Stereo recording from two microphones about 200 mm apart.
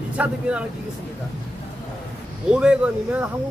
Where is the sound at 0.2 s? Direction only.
5° right (ahead or behind).